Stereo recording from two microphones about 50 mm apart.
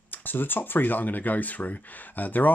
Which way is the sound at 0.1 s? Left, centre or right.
Left.